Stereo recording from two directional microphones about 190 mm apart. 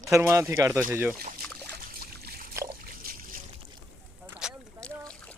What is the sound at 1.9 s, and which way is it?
Trickle, 55° right (ahead or behind).